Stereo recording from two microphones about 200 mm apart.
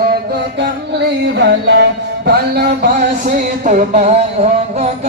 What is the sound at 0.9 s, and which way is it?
Music, 55° right (ahead or behind).